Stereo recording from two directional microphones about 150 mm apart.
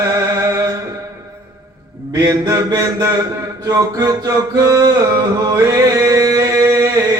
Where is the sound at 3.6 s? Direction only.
25° right (ahead or behind).